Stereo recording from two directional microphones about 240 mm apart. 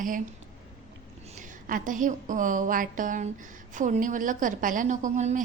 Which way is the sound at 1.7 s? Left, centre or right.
Right.